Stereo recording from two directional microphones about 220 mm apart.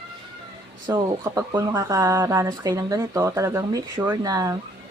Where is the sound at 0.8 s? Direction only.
15° right (ahead or behind).